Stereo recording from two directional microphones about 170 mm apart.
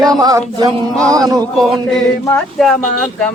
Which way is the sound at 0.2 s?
25° right (ahead or behind).